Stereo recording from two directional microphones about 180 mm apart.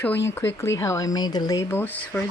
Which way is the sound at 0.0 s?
10° left (ahead or behind).